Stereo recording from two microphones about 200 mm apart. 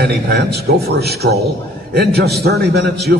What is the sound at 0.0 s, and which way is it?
A man's voice, 55° right (ahead or behind).